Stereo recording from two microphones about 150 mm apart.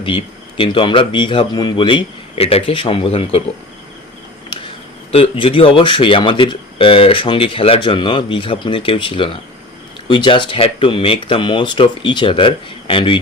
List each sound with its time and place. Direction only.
0.0 s speech: 35° left (ahead or behind)
5.1 s speech: 40° left (ahead or behind)